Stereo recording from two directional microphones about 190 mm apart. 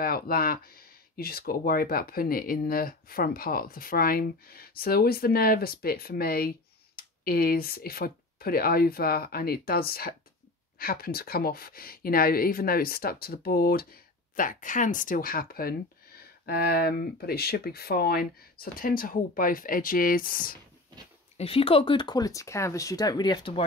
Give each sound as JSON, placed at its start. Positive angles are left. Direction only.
{"t": 0.0, "sound": "speech", "side_deg": 50}
{"t": 21.4, "sound": "speech", "side_deg": 30}